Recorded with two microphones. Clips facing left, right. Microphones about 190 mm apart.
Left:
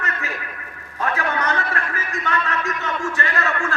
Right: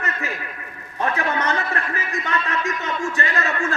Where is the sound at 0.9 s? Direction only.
20° right (ahead or behind).